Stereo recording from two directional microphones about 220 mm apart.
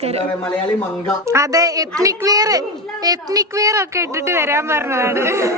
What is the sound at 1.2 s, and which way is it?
A woman's voice, 15° right (ahead or behind).